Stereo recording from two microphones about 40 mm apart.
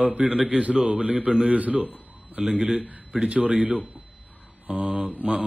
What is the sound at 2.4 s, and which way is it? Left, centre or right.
Speech, centre.